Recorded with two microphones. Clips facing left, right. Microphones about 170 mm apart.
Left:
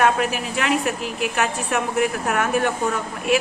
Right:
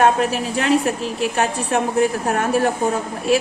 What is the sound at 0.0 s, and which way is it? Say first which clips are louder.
A woman's voice: right 3 dB; 35° right (ahead or behind).